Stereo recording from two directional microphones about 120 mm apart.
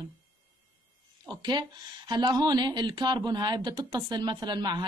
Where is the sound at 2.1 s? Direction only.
35° right (ahead or behind).